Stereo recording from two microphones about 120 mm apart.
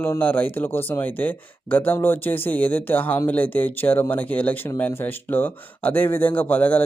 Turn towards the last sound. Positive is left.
turn(degrees=15)  # may be behind; listen again after turning